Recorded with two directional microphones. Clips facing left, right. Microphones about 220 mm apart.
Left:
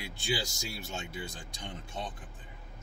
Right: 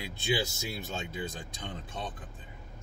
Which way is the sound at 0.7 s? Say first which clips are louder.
Right 3 dB; 15° right (ahead or behind).